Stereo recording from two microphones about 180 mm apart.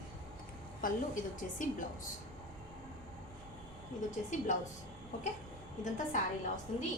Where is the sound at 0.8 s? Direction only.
50° left (ahead or behind).